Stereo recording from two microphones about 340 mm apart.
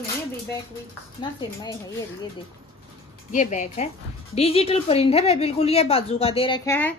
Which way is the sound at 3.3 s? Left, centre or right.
Left.